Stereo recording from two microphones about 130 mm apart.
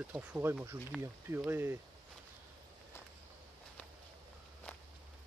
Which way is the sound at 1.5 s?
20° right (ahead or behind).